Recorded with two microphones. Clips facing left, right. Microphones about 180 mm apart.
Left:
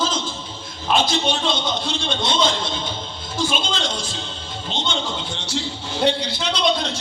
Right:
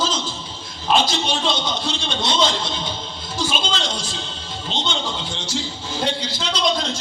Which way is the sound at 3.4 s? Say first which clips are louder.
Left 1 dB; 50° left (ahead or behind).